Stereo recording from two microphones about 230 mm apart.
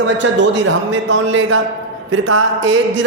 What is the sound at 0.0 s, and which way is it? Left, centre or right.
A man's voice, right.